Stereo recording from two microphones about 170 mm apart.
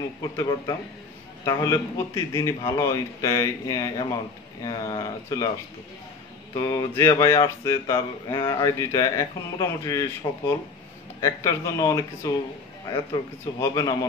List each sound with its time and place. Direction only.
0.2 s speech: 25° left (ahead or behind)
6.5 s speech: 20° left (ahead or behind)
11.1 s speech: 20° left (ahead or behind)